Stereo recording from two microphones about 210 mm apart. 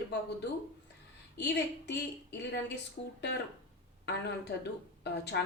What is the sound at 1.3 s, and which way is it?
Speech, 55° left (ahead or behind).